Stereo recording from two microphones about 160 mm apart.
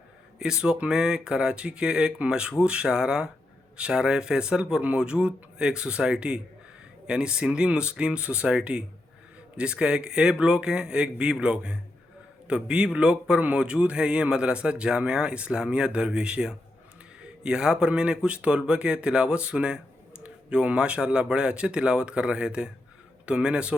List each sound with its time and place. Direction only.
0.3 s speech: 5° right (ahead or behind)